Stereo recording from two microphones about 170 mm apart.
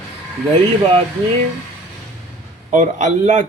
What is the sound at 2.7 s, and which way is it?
Speech, 45° right (ahead or behind).